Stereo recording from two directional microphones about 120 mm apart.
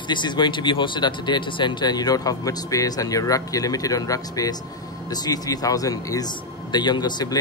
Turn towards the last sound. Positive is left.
turn(degrees=35)  # may be behind; listen again after turning